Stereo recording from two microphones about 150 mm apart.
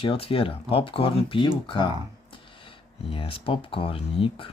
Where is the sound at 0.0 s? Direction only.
40° left (ahead or behind).